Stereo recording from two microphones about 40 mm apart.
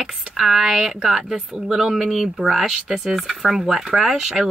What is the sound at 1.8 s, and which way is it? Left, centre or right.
Speech, centre.